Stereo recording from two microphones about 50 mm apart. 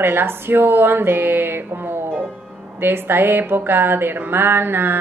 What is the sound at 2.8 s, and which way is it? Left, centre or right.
A woman's voice, right.